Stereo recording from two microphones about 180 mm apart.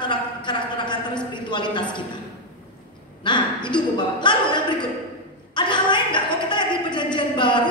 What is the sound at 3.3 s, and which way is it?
Speech, 25° left (ahead or behind).